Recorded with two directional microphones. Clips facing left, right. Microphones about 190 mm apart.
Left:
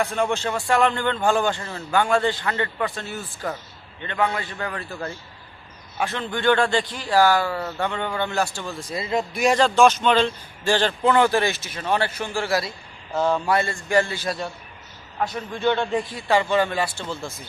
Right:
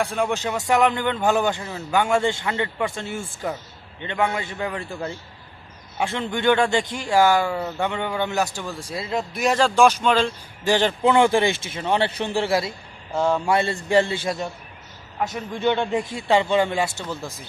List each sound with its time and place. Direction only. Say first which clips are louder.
0.3 s a man's voice: right 1 dB; 15° right (ahead or behind)
8.9 s speech: left 3 dB; centre (ahead or behind)
10.6 s a man's voice: right 1 dB; 20° right (ahead or behind)
13.1 s speech: even; 10° right (ahead or behind)
13.5 s a man's voice: right 2 dB; 25° right (ahead or behind)